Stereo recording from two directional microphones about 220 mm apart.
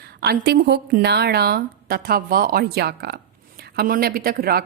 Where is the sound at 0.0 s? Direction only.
45° right (ahead or behind).